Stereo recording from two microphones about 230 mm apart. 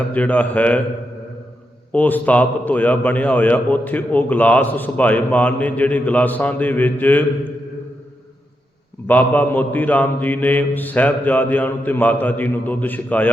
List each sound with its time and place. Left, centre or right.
0.0 s a man's voice: centre
1.9 s a man's voice: centre
9.0 s a man's voice: centre